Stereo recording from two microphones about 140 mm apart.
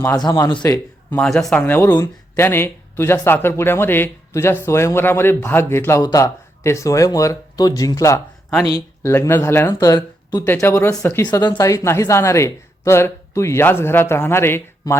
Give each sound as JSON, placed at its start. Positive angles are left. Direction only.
{"t": 0.2, "sound": "speech", "side_deg": 25}
{"t": 1.1, "sound": "speech", "side_deg": 5}
{"t": 1.6, "sound": "speech", "side_deg": 15}
{"t": 11.3, "sound": "speech", "side_deg": 30}